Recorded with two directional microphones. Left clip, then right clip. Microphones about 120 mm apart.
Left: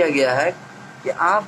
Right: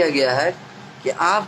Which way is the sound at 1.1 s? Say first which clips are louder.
Even; 40° right (ahead or behind).